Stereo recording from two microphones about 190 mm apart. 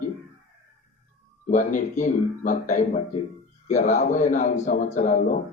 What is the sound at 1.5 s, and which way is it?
A man's voice, 40° left (ahead or behind).